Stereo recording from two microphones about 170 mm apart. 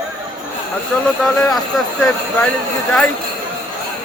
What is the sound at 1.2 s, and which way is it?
Speech, centre (ahead or behind).